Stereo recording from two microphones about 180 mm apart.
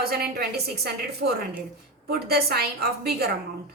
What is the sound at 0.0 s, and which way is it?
A woman's voice, 60° right (ahead or behind).